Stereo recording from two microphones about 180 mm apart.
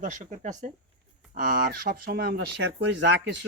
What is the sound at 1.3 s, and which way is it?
Speech, 50° right (ahead or behind).